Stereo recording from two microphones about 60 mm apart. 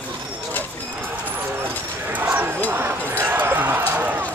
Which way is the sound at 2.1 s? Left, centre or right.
Right.